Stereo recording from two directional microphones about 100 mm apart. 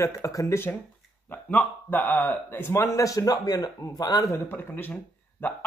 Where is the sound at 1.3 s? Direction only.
15° left (ahead or behind); by 4.4 s 40° left (ahead or behind).